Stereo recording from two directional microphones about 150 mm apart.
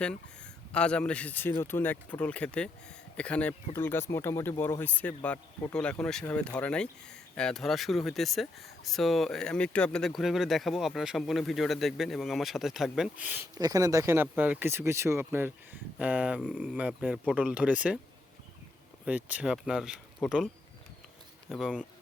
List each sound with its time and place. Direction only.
0.7 s speech: 5° left (ahead or behind); by 13.5 s 10° right (ahead or behind)
13.6 s speech: 25° right (ahead or behind); by 18.0 s 10° right (ahead or behind)
19.0 s speech: 10° right (ahead or behind)
21.5 s speech: centre (ahead or behind)